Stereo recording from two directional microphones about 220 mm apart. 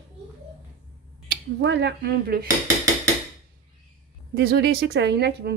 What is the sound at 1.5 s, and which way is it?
Speech, 50° right (ahead or behind).